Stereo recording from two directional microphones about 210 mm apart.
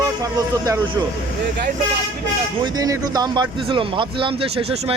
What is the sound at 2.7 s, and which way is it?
Speech, 15° right (ahead or behind).